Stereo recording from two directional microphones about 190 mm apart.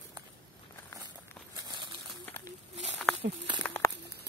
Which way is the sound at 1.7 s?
25° right (ahead or behind).